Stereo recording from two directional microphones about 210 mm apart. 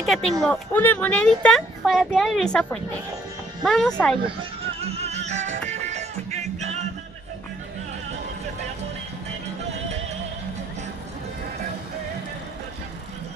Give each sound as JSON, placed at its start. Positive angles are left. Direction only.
{"t": 0.0, "sound": "speech", "side_deg": 0}
{"t": 4.4, "sound": "music", "side_deg": -30}